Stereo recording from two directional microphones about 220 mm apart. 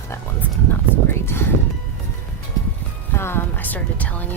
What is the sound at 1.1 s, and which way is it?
Speech, 10° left (ahead or behind).